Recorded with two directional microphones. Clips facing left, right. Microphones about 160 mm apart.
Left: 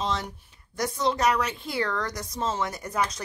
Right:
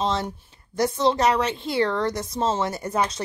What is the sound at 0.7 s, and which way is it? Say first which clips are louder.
Speech: right 5 dB; 30° right (ahead or behind).